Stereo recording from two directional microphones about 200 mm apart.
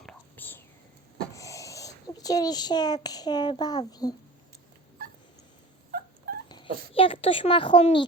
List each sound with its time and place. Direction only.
0.0 s whispering: 5° left (ahead or behind)
1.3 s a child's voice: 15° left (ahead or behind)
6.5 s speech: 25° left (ahead or behind)